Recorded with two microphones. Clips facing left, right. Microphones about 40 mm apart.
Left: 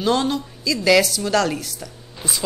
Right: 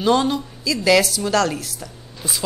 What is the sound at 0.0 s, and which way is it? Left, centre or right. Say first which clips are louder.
Speech: right 2 dB; centre.